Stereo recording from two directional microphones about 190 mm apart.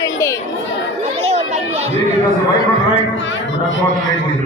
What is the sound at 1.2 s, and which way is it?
Chatter, 35° right (ahead or behind).